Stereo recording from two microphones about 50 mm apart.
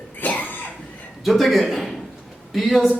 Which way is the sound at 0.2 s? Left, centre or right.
Left.